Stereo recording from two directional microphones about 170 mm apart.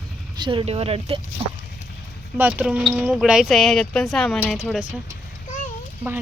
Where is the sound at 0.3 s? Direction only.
30° right (ahead or behind).